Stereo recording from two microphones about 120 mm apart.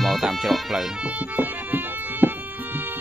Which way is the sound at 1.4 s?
15° right (ahead or behind).